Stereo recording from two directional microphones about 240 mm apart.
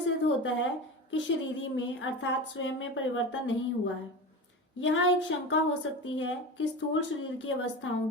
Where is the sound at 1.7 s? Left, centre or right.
Left.